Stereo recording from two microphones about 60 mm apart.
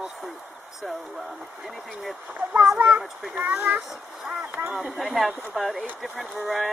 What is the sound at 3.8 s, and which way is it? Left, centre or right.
Speech, centre.